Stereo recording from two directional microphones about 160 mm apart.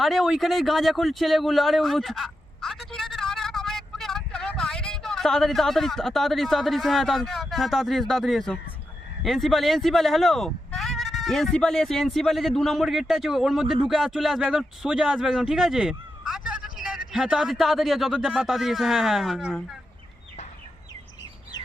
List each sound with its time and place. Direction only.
0.0 s a man's voice: centre (ahead or behind)